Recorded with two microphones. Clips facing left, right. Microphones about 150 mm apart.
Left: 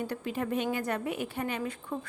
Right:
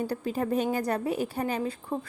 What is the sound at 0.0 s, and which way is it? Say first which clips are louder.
A woman's voice: right 4 dB; 35° right (ahead or behind).